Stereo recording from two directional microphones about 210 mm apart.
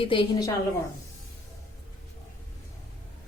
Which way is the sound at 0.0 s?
25° left (ahead or behind).